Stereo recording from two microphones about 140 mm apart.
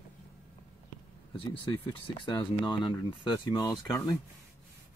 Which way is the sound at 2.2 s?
35° left (ahead or behind).